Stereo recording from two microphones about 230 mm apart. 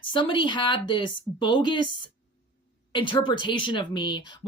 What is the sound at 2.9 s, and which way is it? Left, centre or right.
Speech, left.